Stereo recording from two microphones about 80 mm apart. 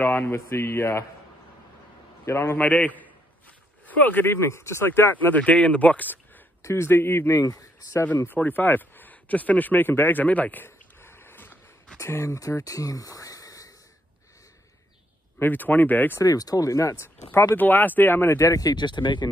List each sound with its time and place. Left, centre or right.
0.0 s speech: left
2.2 s speech: left
6.6 s speech: left
7.4 s speech: left
8.3 s speech: left
15.3 s speech: left
16.2 s speech: left
17.6 s speech: left
18.9 s speech: left